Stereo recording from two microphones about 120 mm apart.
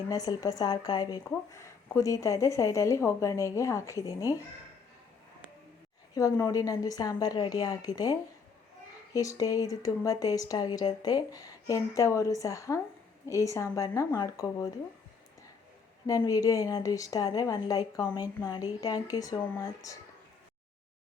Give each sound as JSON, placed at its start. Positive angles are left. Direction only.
{"t": 0.1, "sound": "a woman's voice", "side_deg": 30}
{"t": 1.5, "sound": "speech", "side_deg": 25}
{"t": 6.1, "sound": "a woman's voice", "side_deg": 30}
{"t": 9.1, "sound": "speech", "side_deg": 30}
{"t": 16.0, "sound": "a woman's voice", "side_deg": 30}